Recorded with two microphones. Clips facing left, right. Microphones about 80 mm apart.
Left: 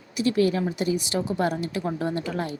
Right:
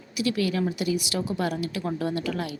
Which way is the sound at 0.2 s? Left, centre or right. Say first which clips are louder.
Left 3 dB; left.